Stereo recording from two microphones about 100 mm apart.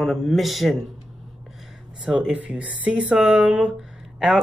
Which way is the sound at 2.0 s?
10° right (ahead or behind).